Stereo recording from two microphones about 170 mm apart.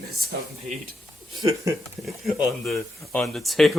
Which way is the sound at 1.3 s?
20° right (ahead or behind).